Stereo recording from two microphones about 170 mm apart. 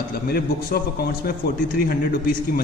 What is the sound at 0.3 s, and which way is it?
A man's voice, 65° left (ahead or behind).